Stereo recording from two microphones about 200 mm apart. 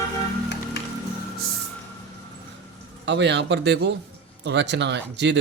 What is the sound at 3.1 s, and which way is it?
Speech, 60° right (ahead or behind).